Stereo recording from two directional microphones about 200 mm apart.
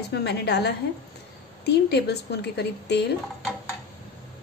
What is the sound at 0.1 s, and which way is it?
A woman's voice, 55° left (ahead or behind).